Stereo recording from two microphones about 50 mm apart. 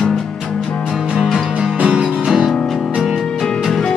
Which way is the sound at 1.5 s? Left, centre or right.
Right.